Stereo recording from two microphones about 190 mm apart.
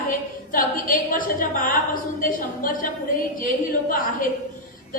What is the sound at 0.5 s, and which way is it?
A woman's voice, 45° left (ahead or behind).